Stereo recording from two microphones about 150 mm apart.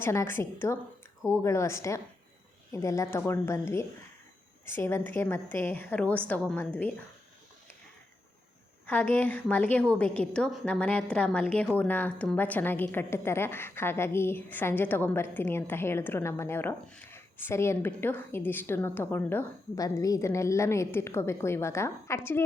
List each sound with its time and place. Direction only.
0.0 s a woman's voice: 15° left (ahead or behind)
8.9 s a woman's voice: 10° left (ahead or behind)